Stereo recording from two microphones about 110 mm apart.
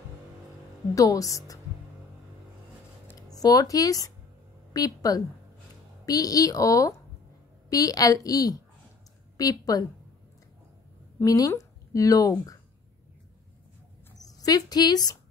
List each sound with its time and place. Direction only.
0.9 s a woman's voice: 30° left (ahead or behind)
3.2 s a woman's voice: 35° left (ahead or behind)
11.1 s speech: 30° left (ahead or behind)
14.2 s a woman's voice: 35° left (ahead or behind)